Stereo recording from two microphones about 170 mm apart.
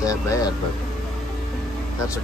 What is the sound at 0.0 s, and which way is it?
Speech, 20° left (ahead or behind).